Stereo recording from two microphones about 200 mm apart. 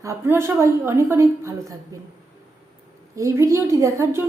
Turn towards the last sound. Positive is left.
turn(degrees=-15)  # may be behind; listen again after turning